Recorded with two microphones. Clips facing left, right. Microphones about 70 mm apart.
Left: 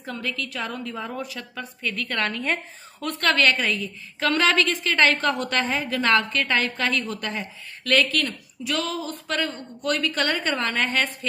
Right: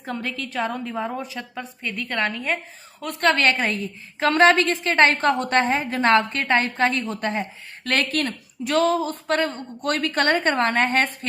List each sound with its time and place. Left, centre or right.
0.0 s a woman's voice: right; by 2.6 s centre
3.2 s a woman's voice: right